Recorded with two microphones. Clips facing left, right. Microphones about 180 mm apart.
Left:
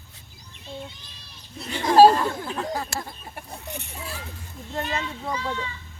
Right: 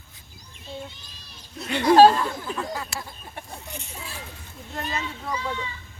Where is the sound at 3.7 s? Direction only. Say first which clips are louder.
Left 2 dB; 65° left (ahead or behind).